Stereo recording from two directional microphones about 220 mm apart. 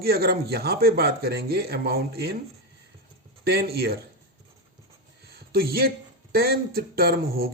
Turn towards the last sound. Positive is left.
turn(degrees=-45)  # may be behind; listen again after turning